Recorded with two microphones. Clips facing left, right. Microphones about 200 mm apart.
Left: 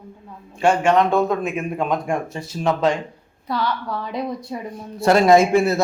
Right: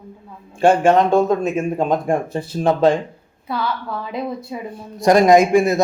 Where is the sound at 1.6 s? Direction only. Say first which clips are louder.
Right 4 dB; 30° right (ahead or behind).